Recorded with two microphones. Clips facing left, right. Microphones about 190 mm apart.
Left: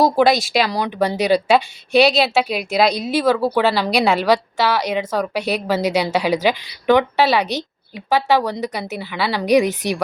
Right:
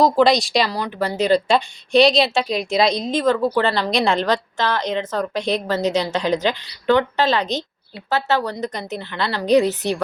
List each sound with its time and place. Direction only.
0.0 s speech: 5° left (ahead or behind)
0.7 s a woman's voice: 15° left (ahead or behind)